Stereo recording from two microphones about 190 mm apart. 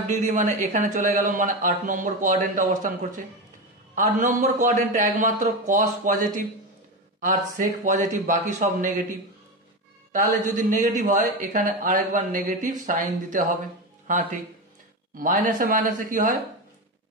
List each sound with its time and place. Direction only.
0.1 s speech: 40° right (ahead or behind)
10.1 s speech: 40° right (ahead or behind)